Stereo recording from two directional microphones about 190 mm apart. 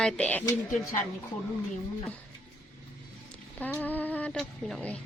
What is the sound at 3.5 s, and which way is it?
Speech, 10° left (ahead or behind).